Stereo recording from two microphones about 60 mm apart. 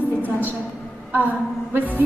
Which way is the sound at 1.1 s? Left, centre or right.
Right.